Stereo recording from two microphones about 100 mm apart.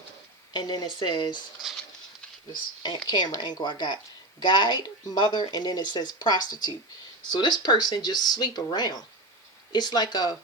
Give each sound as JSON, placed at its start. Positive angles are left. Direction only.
{"t": 0.5, "sound": "a woman's voice", "side_deg": 45}
{"t": 2.5, "sound": "a woman's voice", "side_deg": 45}